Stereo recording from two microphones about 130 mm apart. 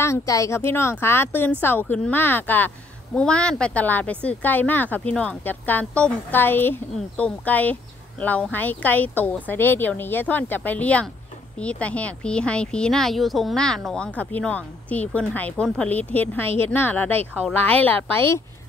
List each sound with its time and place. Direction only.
0.0 s speech: 25° left (ahead or behind)